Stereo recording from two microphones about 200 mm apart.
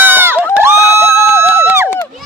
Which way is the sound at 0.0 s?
10° right (ahead or behind).